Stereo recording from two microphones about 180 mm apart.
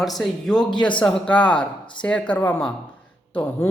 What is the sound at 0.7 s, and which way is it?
Speech, 25° left (ahead or behind).